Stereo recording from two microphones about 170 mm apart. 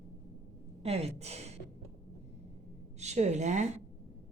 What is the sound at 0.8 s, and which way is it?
Speech, 35° right (ahead or behind).